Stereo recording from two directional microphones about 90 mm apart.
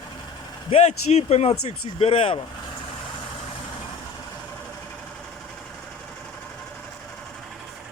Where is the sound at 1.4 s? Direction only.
90° left.